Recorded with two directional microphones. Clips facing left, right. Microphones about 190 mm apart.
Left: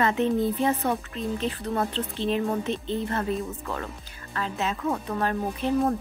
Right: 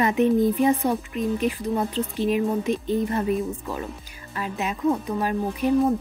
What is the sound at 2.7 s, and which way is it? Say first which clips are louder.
Speech: right 5 dB; 45° right (ahead or behind).